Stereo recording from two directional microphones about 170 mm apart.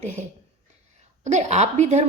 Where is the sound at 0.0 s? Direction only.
45° right (ahead or behind).